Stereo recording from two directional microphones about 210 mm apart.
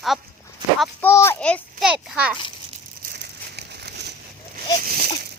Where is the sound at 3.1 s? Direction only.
50° right (ahead or behind).